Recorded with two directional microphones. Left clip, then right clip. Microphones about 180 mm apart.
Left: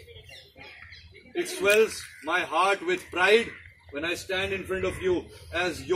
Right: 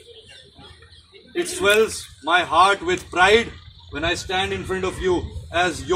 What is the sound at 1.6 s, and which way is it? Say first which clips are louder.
A man's voice: right 4 dB; 5° right (ahead or behind).